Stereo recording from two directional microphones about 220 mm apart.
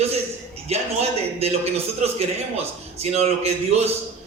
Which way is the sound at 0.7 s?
30° right (ahead or behind).